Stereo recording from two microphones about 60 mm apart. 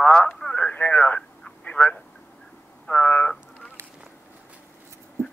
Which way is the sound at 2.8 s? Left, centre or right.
Left.